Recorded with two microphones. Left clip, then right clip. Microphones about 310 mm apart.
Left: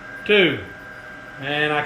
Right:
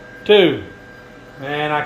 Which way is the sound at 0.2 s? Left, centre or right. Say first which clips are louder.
Right 5 dB; centre.